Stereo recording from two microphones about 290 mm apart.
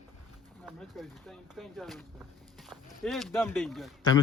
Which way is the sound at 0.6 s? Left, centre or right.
Centre.